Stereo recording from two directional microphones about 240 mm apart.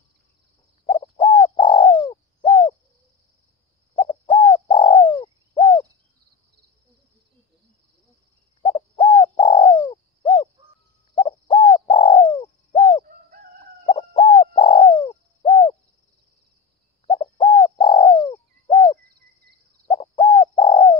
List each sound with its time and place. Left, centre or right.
0.8 s bird: left
3.9 s bird: centre
8.6 s bird: centre
17.0 s bird: left